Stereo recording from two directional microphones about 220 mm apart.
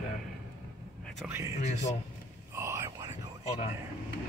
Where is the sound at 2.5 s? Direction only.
10° right (ahead or behind).